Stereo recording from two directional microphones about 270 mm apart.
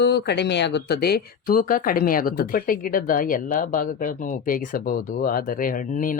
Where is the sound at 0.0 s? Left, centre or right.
Left.